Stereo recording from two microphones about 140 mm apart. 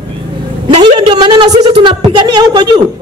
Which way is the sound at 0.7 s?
35° right (ahead or behind).